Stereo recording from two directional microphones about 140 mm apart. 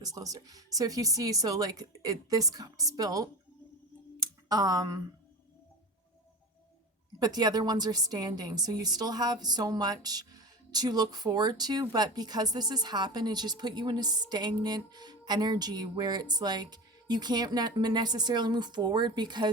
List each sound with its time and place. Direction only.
0.0 s a woman's voice: 25° right (ahead or behind)
4.2 s a sound: 25° right (ahead or behind)
7.2 s a woman's voice: 30° right (ahead or behind)